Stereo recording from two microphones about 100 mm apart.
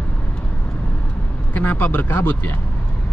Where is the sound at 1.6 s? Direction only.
15° left (ahead or behind).